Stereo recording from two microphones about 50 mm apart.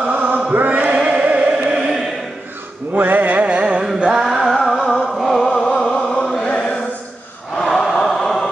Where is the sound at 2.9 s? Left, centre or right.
Right.